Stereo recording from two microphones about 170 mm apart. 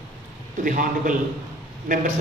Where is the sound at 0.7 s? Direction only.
50° right (ahead or behind).